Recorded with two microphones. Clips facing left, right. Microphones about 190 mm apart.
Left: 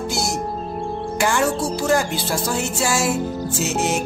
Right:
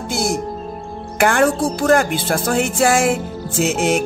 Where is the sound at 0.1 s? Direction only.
55° right (ahead or behind).